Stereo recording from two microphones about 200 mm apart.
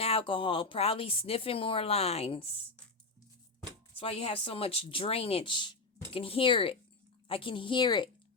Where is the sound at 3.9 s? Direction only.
30° left (ahead or behind).